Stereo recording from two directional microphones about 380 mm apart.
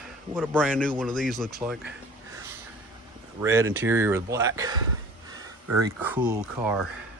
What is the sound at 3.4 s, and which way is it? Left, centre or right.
Speech, centre.